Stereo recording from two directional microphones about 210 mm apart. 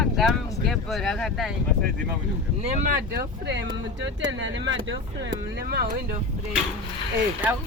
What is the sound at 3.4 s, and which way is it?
Speech, 55° right (ahead or behind).